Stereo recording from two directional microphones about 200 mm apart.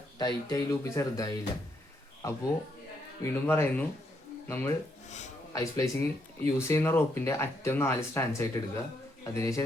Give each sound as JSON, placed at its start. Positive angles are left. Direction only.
{"t": 0.2, "sound": "speech", "side_deg": 20}
{"t": 5.0, "sound": "speech", "side_deg": 35}
{"t": 5.5, "sound": "speech", "side_deg": 15}